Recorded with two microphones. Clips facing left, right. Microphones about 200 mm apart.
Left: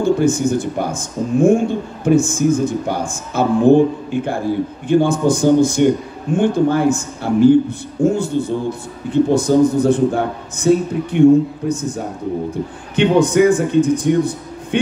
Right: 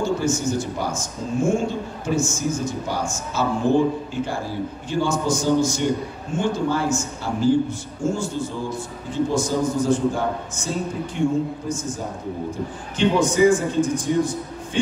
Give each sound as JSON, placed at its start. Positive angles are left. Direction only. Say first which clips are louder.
{"t": 0.0, "sound": "a man's voice", "louder": "left 7 dB", "side_deg": 55}